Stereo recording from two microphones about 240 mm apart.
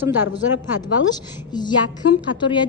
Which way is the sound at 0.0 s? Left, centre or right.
Centre.